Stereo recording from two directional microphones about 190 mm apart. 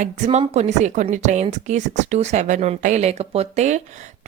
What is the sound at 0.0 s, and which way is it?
A woman's voice, 35° right (ahead or behind).